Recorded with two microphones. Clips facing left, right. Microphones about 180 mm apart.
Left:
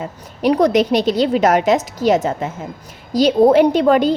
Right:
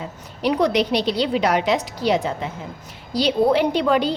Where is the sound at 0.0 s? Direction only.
45° left (ahead or behind).